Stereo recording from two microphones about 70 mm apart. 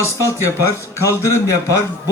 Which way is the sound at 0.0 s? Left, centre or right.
Left.